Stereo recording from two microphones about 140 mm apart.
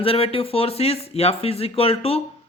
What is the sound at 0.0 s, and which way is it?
Speech, 45° left (ahead or behind).